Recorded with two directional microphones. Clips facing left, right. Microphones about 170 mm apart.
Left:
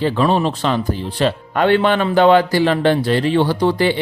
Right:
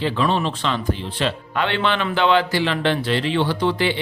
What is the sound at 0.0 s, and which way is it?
A man's voice, 45° left (ahead or behind).